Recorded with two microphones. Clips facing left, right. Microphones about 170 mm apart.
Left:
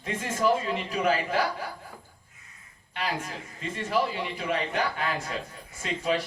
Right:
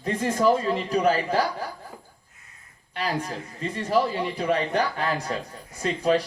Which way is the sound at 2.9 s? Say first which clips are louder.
Right 4 dB; 40° right (ahead or behind).